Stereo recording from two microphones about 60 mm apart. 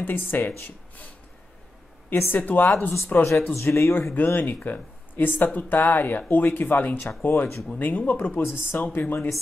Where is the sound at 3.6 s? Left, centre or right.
Left.